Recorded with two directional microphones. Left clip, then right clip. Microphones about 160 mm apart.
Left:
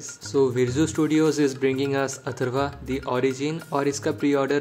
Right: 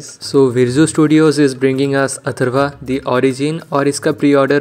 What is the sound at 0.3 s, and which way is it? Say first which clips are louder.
Speech: right 10 dB; 40° right (ahead or behind).